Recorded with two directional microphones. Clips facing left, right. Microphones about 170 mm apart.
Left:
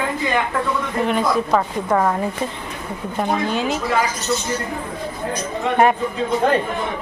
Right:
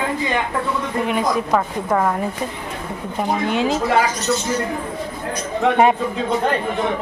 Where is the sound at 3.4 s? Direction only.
25° right (ahead or behind).